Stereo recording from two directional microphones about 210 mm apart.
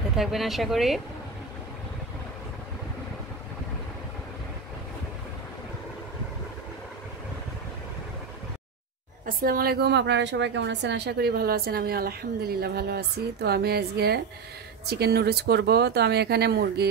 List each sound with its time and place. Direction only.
0.1 s speech: centre (ahead or behind)
9.2 s a woman's voice: 45° right (ahead or behind)